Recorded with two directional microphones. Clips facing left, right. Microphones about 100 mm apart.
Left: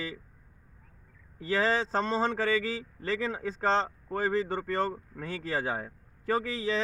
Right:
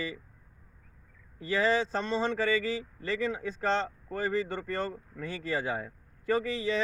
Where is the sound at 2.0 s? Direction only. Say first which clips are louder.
Left 1 dB; 40° left (ahead or behind).